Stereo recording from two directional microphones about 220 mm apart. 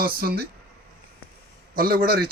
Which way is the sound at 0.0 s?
40° right (ahead or behind).